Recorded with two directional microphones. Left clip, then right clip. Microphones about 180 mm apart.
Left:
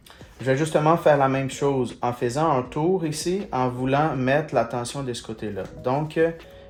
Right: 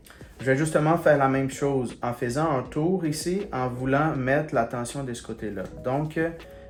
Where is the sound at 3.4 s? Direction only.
50° left (ahead or behind).